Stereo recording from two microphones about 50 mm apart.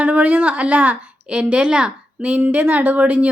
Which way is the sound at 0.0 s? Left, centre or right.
Right.